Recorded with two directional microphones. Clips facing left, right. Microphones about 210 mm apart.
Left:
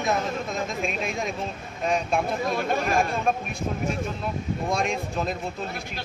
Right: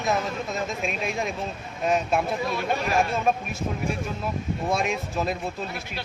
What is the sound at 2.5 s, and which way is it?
Speech, 45° left (ahead or behind).